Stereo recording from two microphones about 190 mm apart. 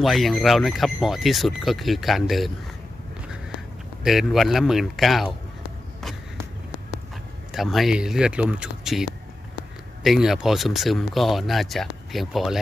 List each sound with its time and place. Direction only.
0.0 s speech: centre (ahead or behind)
4.0 s speech: centre (ahead or behind)
7.5 s speech: centre (ahead or behind)